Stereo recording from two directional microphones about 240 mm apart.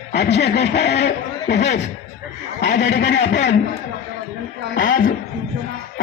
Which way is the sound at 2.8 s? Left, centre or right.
Left.